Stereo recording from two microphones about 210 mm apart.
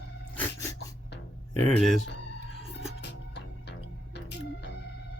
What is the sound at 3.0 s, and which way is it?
Music, 55° left (ahead or behind).